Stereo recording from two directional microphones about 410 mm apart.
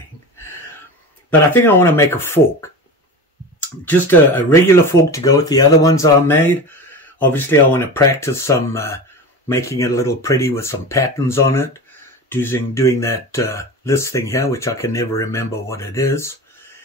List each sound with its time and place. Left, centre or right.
1.3 s speech: centre
3.9 s speech: centre